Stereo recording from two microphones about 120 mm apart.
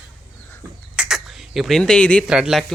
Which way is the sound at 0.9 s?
5° right (ahead or behind).